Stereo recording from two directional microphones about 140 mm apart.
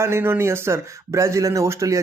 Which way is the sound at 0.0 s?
20° right (ahead or behind).